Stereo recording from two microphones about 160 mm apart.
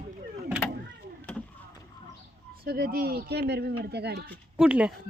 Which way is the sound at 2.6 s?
75° right (ahead or behind).